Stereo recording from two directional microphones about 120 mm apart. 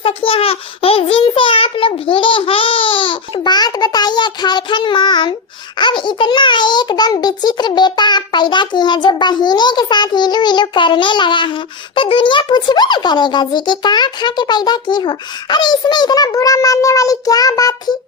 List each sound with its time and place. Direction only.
0.0 s a child's voice: 50° left (ahead or behind); by 17.9 s 35° left (ahead or behind)